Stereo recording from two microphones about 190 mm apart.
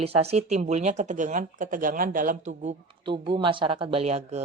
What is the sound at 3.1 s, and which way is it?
Speech, 25° right (ahead or behind).